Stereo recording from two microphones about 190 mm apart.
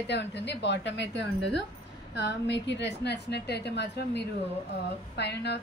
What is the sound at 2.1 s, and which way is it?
A woman's voice, 65° left (ahead or behind).